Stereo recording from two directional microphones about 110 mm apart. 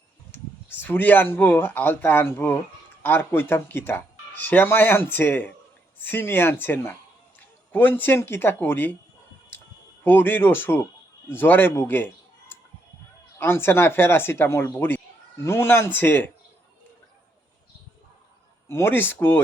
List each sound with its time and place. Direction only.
0.3 s speech: 20° left (ahead or behind)
10.0 s speech: 20° left (ahead or behind)
18.7 s speech: 20° left (ahead or behind)